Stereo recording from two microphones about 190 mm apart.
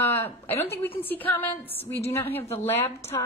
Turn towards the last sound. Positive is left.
turn(degrees=15)  # may be behind; listen again after turning